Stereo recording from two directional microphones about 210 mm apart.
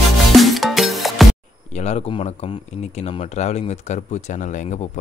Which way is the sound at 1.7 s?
30° left (ahead or behind).